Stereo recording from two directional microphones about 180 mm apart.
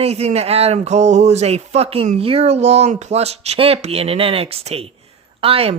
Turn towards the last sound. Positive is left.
turn(degrees=-35)  # may be behind; listen again after turning